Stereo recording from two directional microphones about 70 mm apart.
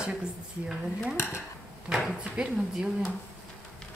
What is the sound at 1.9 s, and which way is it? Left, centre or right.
Speech, centre.